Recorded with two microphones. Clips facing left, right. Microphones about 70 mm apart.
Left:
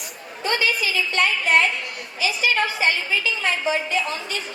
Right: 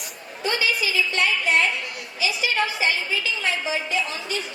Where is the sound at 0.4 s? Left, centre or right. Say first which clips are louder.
Left 1 dB; left.